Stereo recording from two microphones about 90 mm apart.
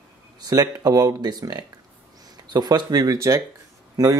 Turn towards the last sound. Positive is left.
turn(degrees=-45)  # may be behind; listen again after turning